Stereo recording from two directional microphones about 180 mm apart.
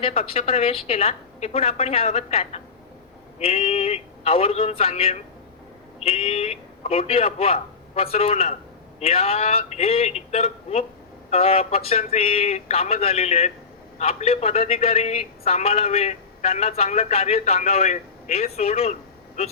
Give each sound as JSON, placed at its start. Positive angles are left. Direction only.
{"t": 0.0, "sound": "a man's voice", "side_deg": 35}